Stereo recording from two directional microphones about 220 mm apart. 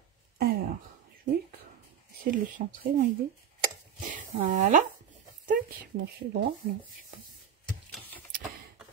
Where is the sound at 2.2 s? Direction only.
35° right (ahead or behind).